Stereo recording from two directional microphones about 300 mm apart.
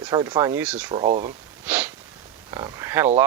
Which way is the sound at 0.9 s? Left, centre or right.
Centre.